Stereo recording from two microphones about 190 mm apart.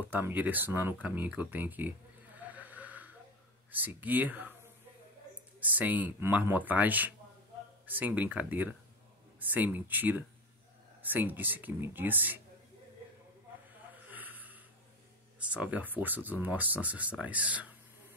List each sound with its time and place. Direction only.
0.1 s speech: 10° right (ahead or behind)
5.6 s speech: 10° right (ahead or behind)
14.0 s a sound: 10° right (ahead or behind)
15.3 s speech: 5° right (ahead or behind)